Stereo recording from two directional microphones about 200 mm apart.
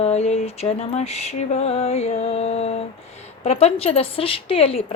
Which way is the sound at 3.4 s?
30° left (ahead or behind).